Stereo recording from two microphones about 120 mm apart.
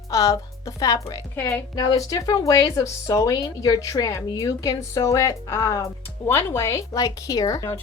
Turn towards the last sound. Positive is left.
turn(degrees=30)  # may be behind; listen again after turning